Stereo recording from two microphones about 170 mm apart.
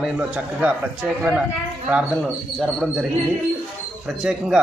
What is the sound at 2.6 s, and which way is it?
Speech, centre (ahead or behind).